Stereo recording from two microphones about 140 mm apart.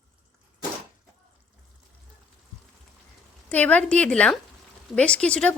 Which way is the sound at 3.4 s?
10° left (ahead or behind).